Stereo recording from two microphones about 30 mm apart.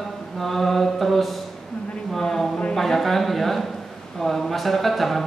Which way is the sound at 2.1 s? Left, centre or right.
Centre.